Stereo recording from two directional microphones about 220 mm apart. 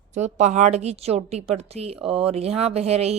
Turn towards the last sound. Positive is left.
turn(degrees=-30)  # may be behind; listen again after turning